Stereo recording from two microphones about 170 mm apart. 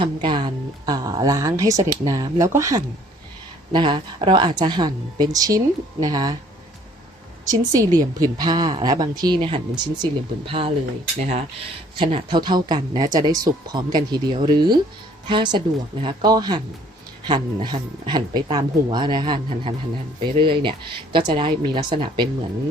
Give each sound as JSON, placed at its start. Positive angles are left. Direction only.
{"t": 0.0, "sound": "a woman's voice", "side_deg": -25}
{"t": 7.4, "sound": "a woman's voice", "side_deg": -20}
{"t": 11.9, "sound": "a woman's voice", "side_deg": -30}